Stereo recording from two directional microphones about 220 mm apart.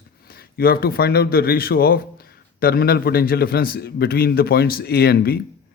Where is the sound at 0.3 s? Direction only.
45° left (ahead or behind).